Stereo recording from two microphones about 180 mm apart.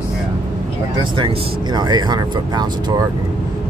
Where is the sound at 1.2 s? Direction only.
25° right (ahead or behind).